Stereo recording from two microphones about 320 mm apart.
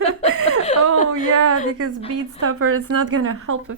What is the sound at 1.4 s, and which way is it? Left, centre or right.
A woman's voice, right.